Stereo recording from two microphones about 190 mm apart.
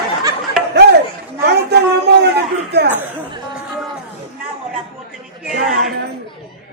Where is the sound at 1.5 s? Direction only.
60° right (ahead or behind).